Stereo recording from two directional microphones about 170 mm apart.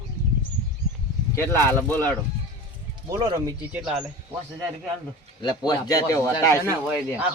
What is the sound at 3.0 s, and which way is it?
Speech, 20° right (ahead or behind).